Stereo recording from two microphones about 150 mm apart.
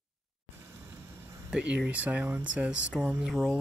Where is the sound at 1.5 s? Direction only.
10° right (ahead or behind).